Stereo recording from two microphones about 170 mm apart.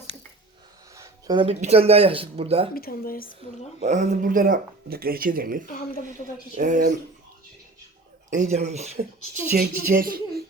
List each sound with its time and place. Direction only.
0.9 s a sound: 20° right (ahead or behind)
1.5 s speech: 35° right (ahead or behind)
2.7 s speech: 60° left (ahead or behind)
3.8 s speech: 45° right (ahead or behind)
5.9 s speech: 55° left (ahead or behind)
6.6 s speech: 50° right (ahead or behind)
8.3 s speech: 45° right (ahead or behind)
9.6 s speech: 55° right (ahead or behind)